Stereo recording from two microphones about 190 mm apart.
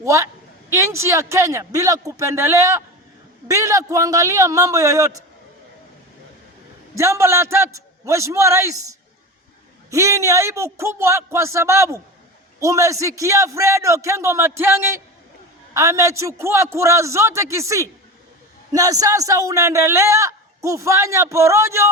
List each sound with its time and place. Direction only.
0.0 s speech: 15° right (ahead or behind)
6.9 s speech: 15° right (ahead or behind)
9.9 s speech: 15° right (ahead or behind)